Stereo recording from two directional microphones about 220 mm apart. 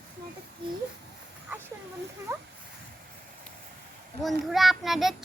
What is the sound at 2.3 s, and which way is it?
Speech, 15° right (ahead or behind).